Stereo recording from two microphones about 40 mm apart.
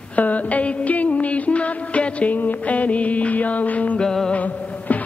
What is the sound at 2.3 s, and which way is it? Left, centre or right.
Music, left.